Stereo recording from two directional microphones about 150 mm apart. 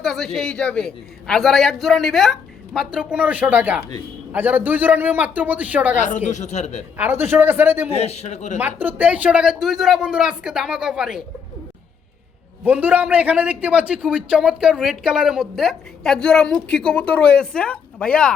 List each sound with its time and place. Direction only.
0.0 s a man's voice: centre (ahead or behind)
6.0 s speech: 55° left (ahead or behind)
6.9 s a man's voice: 15° right (ahead or behind)
7.9 s speech: 45° left (ahead or behind)
8.5 s a man's voice: 15° right (ahead or behind)
12.6 s a man's voice: 10° right (ahead or behind)